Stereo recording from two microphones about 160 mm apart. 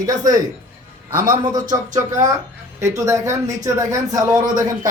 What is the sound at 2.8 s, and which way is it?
A man's voice, 20° right (ahead or behind).